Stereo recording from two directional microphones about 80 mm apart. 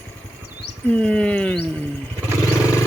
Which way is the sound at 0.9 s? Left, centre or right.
Centre.